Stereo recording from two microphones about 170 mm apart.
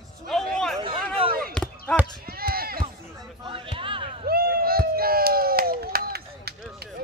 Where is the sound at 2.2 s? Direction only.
60° right (ahead or behind).